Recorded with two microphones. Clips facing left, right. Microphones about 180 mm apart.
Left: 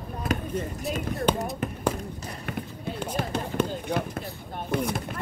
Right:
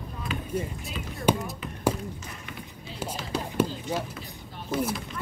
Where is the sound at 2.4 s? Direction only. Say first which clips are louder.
Left 8 dB; 55° left (ahead or behind).